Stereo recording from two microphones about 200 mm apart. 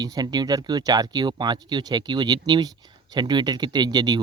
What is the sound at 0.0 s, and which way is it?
Speech, 20° right (ahead or behind).